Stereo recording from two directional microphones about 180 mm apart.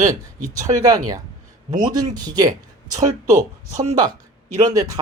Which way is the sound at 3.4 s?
40° right (ahead or behind).